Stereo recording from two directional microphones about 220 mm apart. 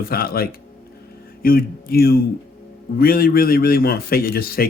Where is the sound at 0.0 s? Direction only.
45° left (ahead or behind).